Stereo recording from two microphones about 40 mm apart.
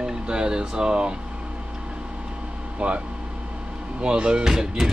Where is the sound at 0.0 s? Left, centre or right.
Right.